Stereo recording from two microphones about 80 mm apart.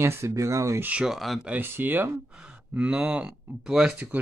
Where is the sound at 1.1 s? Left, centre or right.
Centre.